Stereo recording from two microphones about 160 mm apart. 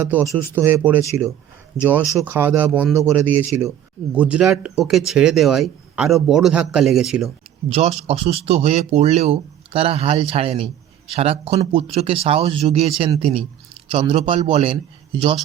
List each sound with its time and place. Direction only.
0.0 s speech: 15° right (ahead or behind)
7.7 s speech: 40° right (ahead or behind)